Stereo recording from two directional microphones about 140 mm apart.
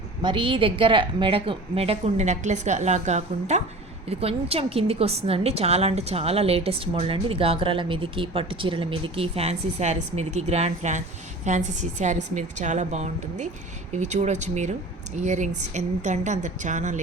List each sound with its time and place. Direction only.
0.2 s a woman's voice: 35° right (ahead or behind); by 17.0 s 60° right (ahead or behind)